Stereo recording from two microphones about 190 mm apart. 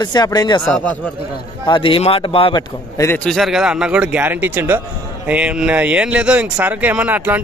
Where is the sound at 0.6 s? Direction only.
5° left (ahead or behind).